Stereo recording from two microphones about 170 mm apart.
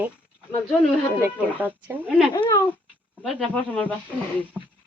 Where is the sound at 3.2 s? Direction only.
10° left (ahead or behind).